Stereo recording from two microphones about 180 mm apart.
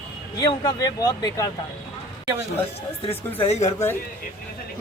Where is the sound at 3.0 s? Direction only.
35° left (ahead or behind).